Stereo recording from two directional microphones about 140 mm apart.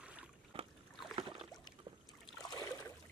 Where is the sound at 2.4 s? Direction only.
25° left (ahead or behind).